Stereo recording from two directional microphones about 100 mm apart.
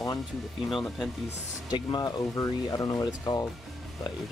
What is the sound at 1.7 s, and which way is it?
Speech, 45° left (ahead or behind).